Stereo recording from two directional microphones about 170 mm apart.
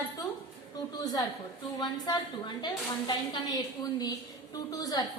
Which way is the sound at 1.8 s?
25° left (ahead or behind).